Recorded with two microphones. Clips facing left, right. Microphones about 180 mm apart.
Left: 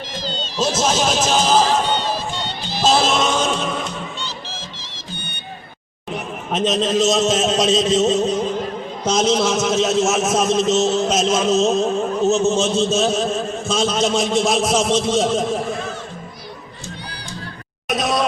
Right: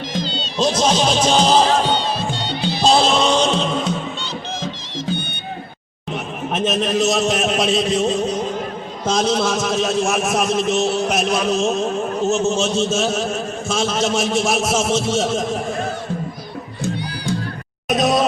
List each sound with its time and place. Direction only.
0.6 s speech: 5° left (ahead or behind)
3.0 s music: 5° left (ahead or behind)
6.5 s a man's voice: 20° left (ahead or behind)
17.8 s a sound: centre (ahead or behind)